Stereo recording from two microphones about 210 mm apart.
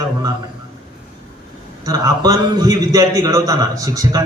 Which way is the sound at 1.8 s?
15° right (ahead or behind).